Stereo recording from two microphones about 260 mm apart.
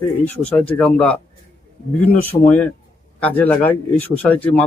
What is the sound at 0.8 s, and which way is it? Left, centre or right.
Speech, centre.